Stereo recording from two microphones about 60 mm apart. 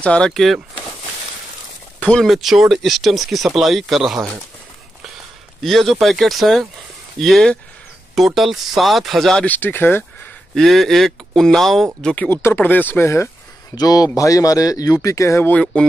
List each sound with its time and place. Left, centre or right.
0.0 s a sound: centre
0.3 s speech: centre
2.0 s a sound: centre
2.2 s speech: centre
5.6 s speech: centre
9.4 s speech: left
10.5 s speech: centre
12.3 s speech: left
12.6 s speech: left
13.0 s speech: left
13.7 s speech: left
15.5 s a sound: centre